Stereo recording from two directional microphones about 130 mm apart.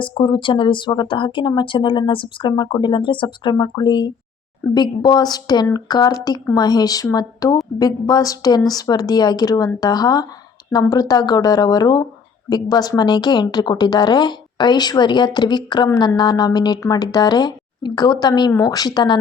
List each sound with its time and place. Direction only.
0.0 s speech: 40° left (ahead or behind)